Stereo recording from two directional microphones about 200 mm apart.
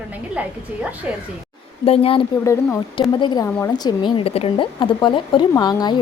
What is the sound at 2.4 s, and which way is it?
Speech, 15° left (ahead or behind).